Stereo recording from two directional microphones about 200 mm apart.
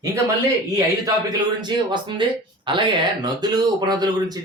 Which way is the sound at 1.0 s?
20° right (ahead or behind).